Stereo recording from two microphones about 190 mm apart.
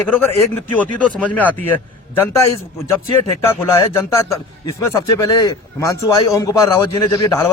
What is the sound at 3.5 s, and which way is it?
Speech, 10° left (ahead or behind).